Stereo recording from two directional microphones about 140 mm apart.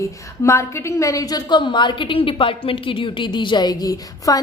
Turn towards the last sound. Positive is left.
turn(degrees=25)  # may be behind; listen again after turning